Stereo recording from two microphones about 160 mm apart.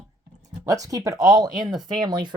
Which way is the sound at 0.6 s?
20° right (ahead or behind).